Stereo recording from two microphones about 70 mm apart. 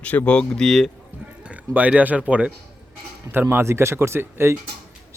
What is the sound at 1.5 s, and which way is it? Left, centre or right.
Speech, right.